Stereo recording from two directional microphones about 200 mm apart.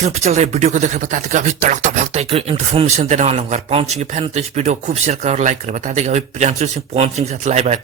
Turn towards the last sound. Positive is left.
turn(degrees=-35)  # may be behind; listen again after turning